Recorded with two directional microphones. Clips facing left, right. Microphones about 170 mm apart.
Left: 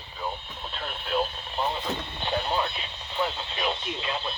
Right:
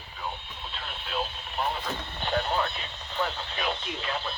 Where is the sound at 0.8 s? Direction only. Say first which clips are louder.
Left 6 dB; 50° left (ahead or behind).